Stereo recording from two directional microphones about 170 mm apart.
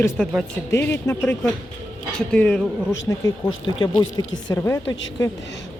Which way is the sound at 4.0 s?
25° left (ahead or behind).